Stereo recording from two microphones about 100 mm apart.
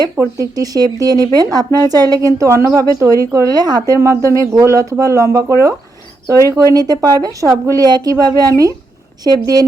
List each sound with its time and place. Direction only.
0.3 s speech: 35° right (ahead or behind)